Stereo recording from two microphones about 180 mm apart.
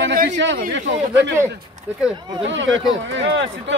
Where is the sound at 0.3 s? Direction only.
90° right.